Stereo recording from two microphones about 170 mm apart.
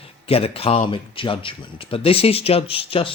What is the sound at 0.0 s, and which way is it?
Speech, 35° left (ahead or behind).